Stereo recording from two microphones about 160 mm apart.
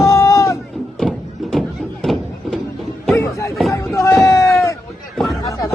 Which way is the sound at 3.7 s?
20° left (ahead or behind).